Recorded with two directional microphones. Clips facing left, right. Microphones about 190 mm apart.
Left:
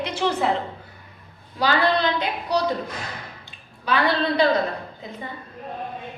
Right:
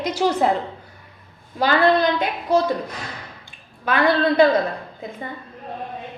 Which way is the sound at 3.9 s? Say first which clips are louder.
Right 1 dB; 50° right (ahead or behind).